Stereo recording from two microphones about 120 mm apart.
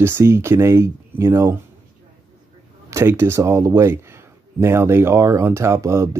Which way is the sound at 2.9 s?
20° right (ahead or behind).